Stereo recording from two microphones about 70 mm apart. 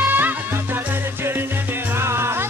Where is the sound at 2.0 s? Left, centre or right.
Right.